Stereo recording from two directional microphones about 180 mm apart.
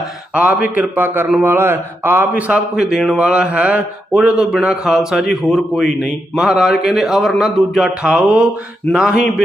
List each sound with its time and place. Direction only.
0.3 s a man's voice: 10° right (ahead or behind)